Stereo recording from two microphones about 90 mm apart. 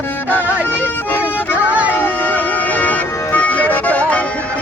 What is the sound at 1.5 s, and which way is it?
Music, 15° right (ahead or behind).